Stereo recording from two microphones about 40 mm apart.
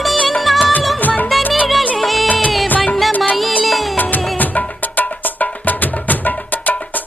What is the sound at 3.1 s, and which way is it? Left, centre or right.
Music, left.